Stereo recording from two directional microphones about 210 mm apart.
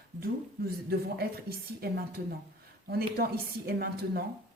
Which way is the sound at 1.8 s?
50° right (ahead or behind).